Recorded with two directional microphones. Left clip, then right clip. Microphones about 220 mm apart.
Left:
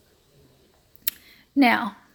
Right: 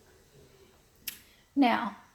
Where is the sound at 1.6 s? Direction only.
35° left (ahead or behind).